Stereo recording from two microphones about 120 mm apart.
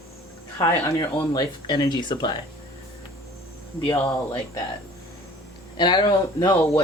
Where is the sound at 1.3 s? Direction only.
35° left (ahead or behind).